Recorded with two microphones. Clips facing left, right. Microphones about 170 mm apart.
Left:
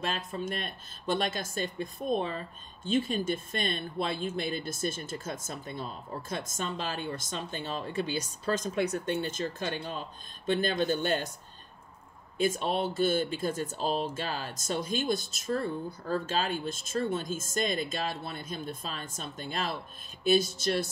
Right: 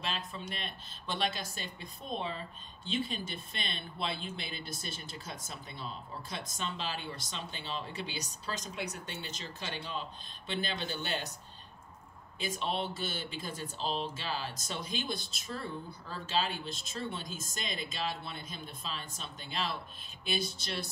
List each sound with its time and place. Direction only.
0.0 s speech: 50° left (ahead or behind)
12.4 s speech: 50° left (ahead or behind)